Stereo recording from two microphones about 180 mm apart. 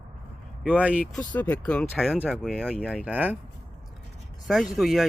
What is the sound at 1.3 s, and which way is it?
Speech, 10° left (ahead or behind).